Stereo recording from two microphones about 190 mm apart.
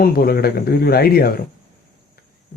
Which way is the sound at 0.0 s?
50° left (ahead or behind).